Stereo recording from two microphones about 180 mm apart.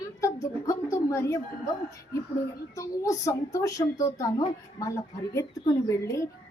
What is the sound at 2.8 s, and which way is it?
A child's voice, 15° left (ahead or behind).